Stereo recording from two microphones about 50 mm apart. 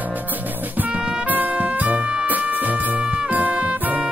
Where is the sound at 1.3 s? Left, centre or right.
Right.